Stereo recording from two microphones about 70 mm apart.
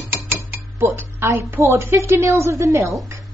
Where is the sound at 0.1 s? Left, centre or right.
Right.